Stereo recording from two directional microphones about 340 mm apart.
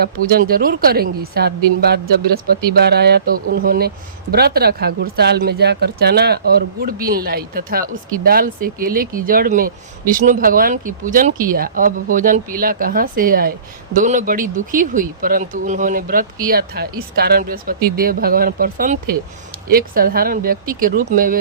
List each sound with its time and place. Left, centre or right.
0.0 s speech: right